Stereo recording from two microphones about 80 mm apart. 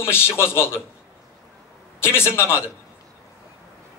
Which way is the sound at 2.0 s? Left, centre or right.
Left.